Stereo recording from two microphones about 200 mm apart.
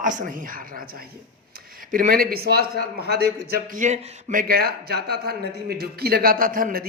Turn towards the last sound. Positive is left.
turn(degrees=-45)  # may be behind; listen again after turning